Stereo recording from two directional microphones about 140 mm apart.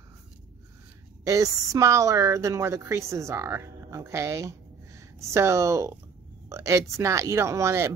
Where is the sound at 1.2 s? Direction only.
25° right (ahead or behind).